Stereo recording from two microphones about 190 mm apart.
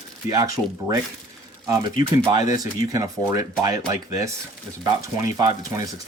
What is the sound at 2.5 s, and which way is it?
Speech, 20° right (ahead or behind).